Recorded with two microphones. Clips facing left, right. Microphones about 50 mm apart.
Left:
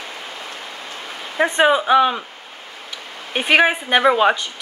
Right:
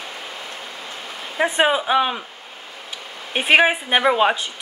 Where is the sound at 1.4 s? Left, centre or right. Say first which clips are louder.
Left 3 dB; centre.